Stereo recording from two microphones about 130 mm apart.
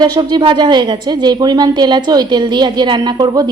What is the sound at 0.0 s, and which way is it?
A woman's voice, 35° right (ahead or behind).